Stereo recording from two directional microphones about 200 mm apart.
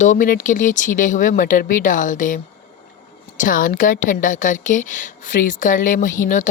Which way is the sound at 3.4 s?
45° left (ahead or behind).